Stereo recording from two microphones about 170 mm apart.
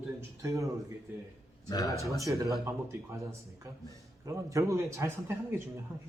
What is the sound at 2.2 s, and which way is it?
Speech, 20° right (ahead or behind).